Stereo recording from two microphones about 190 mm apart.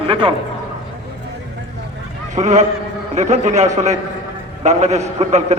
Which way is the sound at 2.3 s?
40° right (ahead or behind).